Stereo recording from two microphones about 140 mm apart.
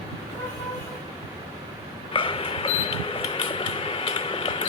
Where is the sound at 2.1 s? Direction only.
40° left (ahead or behind).